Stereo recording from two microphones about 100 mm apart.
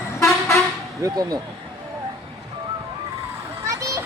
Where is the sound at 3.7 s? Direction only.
30° right (ahead or behind).